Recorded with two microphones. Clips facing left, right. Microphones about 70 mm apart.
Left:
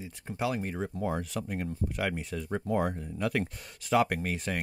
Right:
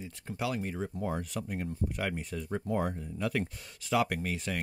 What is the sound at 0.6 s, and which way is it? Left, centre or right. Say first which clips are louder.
Speech: left 1 dB; left.